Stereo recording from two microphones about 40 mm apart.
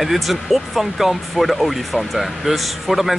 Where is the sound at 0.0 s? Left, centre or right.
Centre.